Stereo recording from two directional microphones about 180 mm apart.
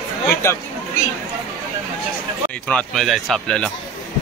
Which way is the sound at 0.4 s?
15° left (ahead or behind).